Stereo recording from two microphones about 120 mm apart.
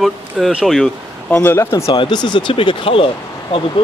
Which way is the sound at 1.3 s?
15° left (ahead or behind).